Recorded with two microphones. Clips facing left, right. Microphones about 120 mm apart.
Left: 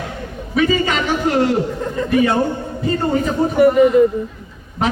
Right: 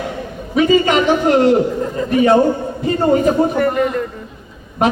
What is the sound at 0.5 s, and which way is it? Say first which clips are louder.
A man's voice: right 4 dB; 20° right (ahead or behind).